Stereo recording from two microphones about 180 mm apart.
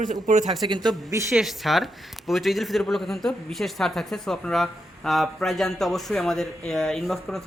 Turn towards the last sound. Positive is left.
turn(degrees=0)  # may be behind; listen again after turning